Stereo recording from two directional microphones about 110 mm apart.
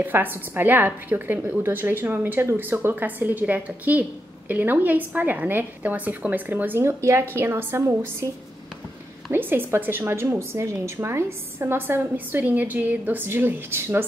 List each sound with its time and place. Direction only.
0.0 s a woman's voice: 15° right (ahead or behind)
9.3 s a woman's voice: 20° right (ahead or behind)